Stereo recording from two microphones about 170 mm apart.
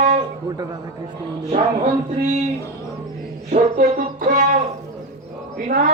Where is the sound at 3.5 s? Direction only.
50° right (ahead or behind).